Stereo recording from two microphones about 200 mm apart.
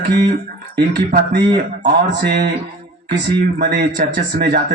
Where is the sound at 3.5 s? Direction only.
55° right (ahead or behind).